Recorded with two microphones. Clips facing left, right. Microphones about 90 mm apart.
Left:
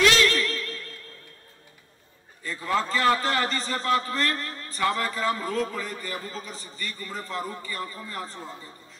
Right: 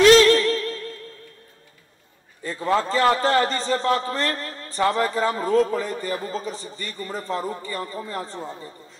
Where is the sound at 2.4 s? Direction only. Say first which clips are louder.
Right 4 dB; 25° right (ahead or behind).